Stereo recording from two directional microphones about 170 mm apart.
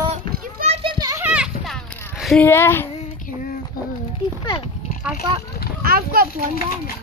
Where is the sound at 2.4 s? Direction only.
15° left (ahead or behind).